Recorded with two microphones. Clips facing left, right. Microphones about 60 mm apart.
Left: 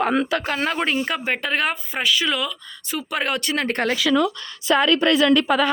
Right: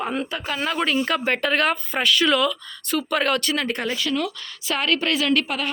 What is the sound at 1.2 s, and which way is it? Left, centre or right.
Speech, centre.